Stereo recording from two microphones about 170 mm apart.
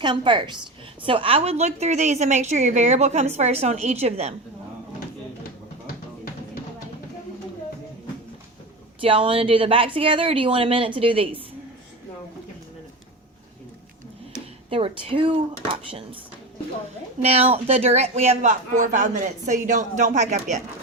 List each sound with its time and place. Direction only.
0.0 s a woman's voice: 25° right (ahead or behind)
9.0 s a woman's voice: 30° right (ahead or behind)
14.7 s a woman's voice: 35° right (ahead or behind)
17.2 s speech: 35° right (ahead or behind)